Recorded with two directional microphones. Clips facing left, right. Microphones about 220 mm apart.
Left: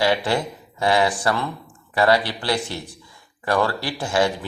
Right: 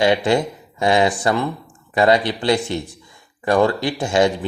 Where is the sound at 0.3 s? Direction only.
20° right (ahead or behind).